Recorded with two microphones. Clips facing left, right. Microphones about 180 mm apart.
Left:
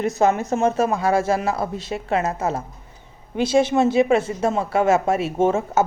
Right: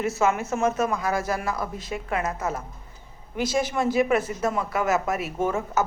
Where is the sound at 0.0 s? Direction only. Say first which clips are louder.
Left 4 dB; 35° left (ahead or behind).